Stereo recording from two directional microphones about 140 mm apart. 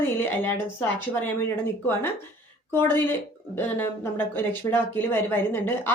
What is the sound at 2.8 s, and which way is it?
A woman's voice, 15° left (ahead or behind).